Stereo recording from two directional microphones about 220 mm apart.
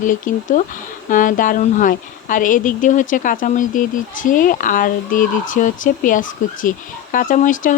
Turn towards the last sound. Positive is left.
turn(degrees=35)  # may be behind; listen again after turning